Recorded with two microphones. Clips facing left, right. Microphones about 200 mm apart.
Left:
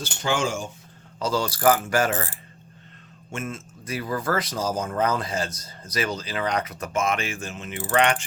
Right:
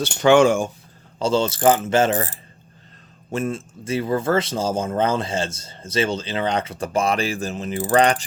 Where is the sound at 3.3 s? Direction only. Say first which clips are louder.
Right 8 dB; 35° right (ahead or behind).